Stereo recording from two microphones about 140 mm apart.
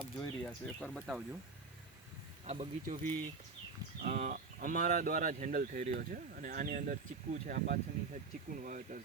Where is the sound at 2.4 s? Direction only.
45° right (ahead or behind).